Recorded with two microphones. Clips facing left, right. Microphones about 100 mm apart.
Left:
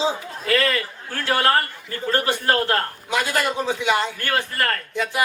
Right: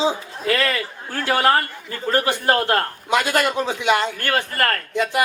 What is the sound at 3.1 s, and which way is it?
Speech, 65° right (ahead or behind).